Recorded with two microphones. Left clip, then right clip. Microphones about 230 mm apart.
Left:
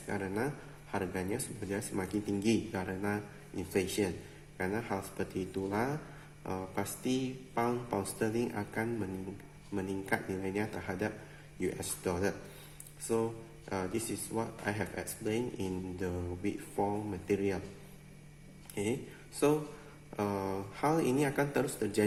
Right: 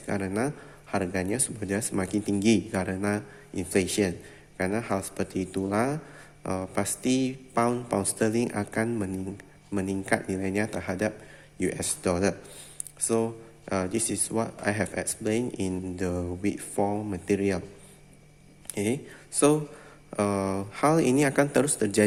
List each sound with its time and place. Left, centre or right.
0.1 s speech: right
18.7 s speech: right
20.1 s speech: right